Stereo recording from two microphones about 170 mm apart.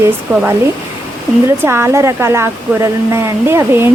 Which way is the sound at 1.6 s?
15° right (ahead or behind).